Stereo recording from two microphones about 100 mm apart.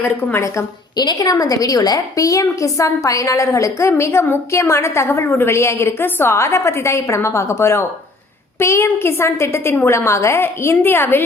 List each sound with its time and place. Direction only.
0.0 s a woman's voice: 20° left (ahead or behind)
0.4 s a woman's voice: 30° left (ahead or behind)